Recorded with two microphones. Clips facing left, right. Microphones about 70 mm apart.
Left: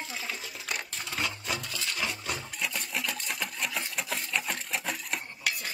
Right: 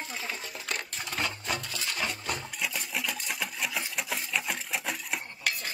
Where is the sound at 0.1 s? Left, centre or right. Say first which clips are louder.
Right 1 dB; centre.